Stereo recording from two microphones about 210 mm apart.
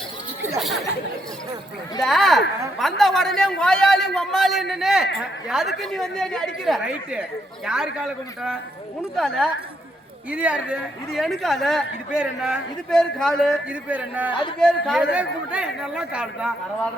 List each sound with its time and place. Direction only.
2.0 s speech: centre (ahead or behind)